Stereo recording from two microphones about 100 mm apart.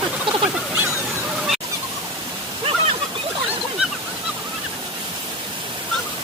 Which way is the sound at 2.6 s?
70° right (ahead or behind).